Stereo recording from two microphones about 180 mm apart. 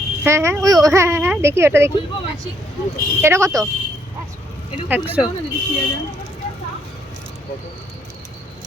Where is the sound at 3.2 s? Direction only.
15° right (ahead or behind).